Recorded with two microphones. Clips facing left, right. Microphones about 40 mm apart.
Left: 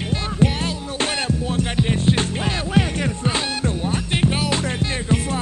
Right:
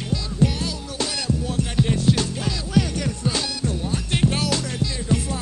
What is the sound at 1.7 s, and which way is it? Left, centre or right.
Music, left.